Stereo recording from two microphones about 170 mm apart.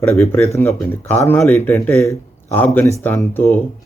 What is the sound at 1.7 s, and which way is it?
Speech, 15° left (ahead or behind).